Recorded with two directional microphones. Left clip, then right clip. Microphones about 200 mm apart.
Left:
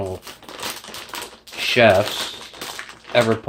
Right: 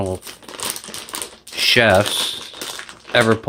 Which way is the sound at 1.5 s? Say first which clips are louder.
Right 1 dB; 40° right (ahead or behind).